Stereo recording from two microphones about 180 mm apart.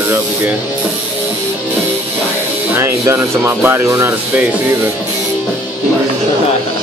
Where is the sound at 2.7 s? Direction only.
15° right (ahead or behind).